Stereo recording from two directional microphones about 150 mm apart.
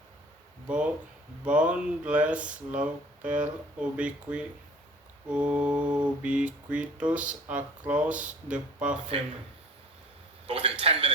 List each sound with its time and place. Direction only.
1.5 s mantra: 10° right (ahead or behind)
10.4 s a man's voice: 40° right (ahead or behind)